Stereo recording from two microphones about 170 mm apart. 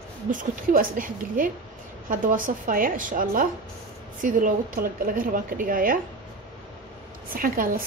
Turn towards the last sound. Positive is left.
turn(degrees=-55)  # may be behind; listen again after turning